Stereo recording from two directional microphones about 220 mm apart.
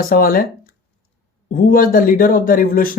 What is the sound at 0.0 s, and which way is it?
Speech, 40° left (ahead or behind).